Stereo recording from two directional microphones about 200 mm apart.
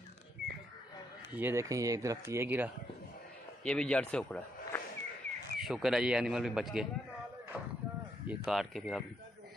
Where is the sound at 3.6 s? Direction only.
5° left (ahead or behind).